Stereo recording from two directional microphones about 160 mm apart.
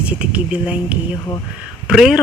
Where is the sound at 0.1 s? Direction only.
10° right (ahead or behind).